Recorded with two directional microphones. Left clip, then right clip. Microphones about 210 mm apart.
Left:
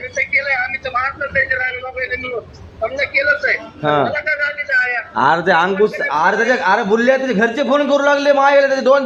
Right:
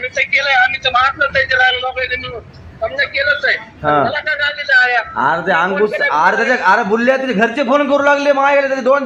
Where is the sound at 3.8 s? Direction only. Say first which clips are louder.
Right 2 dB; 10° left (ahead or behind).